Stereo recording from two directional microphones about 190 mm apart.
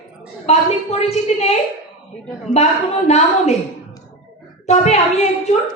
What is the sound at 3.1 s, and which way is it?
Speech, 35° left (ahead or behind).